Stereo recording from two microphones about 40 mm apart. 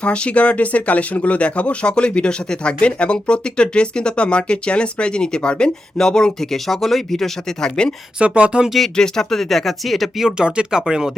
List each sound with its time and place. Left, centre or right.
0.0 s speech: left
8.2 s speech: right
9.0 s speech: centre
10.2 s speech: right